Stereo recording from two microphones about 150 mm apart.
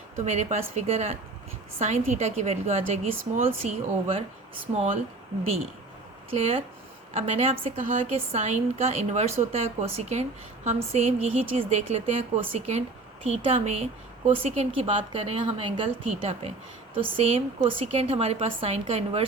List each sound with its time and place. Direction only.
0.3 s a woman's voice: 50° right (ahead or behind)
6.3 s a woman's voice: 45° right (ahead or behind)